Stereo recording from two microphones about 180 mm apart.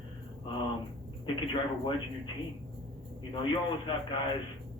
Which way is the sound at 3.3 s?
25° left (ahead or behind).